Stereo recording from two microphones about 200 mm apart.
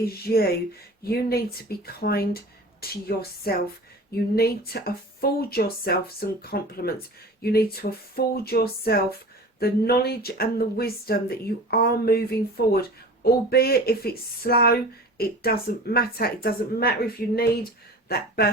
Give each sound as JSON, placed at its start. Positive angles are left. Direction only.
{"t": 0.0, "sound": "speech", "side_deg": 50}